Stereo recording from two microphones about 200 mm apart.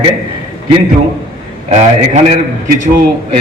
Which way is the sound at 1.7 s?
35° right (ahead or behind).